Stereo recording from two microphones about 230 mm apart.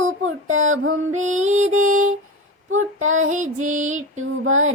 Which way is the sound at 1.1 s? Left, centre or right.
Right.